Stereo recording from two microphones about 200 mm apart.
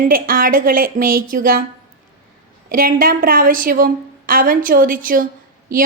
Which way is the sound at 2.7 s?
45° right (ahead or behind).